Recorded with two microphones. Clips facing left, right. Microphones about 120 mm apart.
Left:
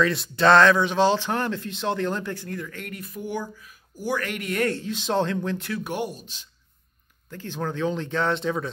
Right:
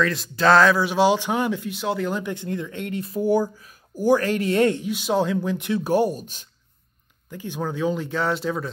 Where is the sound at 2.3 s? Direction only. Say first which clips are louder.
Right 4 dB; 20° right (ahead or behind).